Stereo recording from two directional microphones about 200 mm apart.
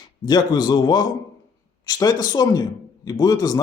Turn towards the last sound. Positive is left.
turn(degrees=20)  # may be behind; listen again after turning